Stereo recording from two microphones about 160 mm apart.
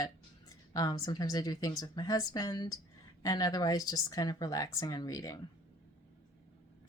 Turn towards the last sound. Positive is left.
turn(degrees=20)  # may be behind; listen again after turning